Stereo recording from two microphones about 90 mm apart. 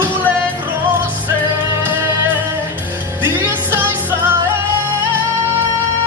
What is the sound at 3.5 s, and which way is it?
Music, 25° right (ahead or behind).